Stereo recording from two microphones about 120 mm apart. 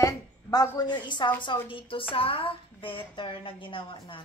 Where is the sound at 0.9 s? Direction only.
40° left (ahead or behind).